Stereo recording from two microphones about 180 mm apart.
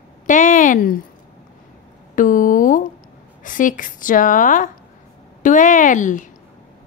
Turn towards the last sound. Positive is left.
turn(degrees=45)  # may be behind; listen again after turning